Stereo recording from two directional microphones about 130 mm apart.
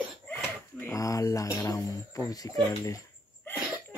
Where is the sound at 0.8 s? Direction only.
25° left (ahead or behind).